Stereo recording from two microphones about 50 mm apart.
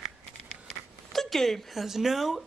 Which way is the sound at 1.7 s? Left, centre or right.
Centre.